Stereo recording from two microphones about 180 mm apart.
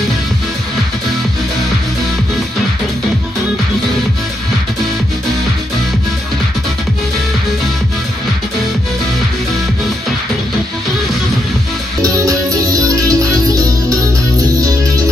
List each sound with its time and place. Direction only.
12.3 s music: 20° right (ahead or behind)